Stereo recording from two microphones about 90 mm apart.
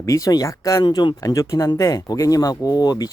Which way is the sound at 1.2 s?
40° left (ahead or behind).